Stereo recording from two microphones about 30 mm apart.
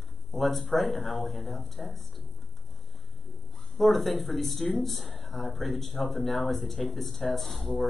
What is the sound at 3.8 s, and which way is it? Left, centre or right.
Speech, centre.